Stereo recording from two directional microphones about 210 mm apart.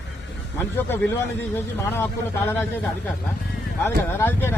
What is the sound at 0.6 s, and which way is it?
A man's voice, 10° left (ahead or behind).